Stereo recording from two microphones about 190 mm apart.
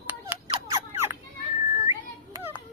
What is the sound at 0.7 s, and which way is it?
Rodents, 15° right (ahead or behind).